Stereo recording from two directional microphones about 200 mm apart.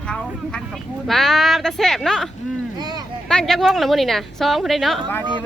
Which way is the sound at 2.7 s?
20° right (ahead or behind).